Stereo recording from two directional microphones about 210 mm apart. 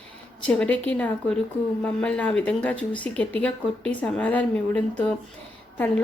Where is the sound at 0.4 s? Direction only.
5° left (ahead or behind).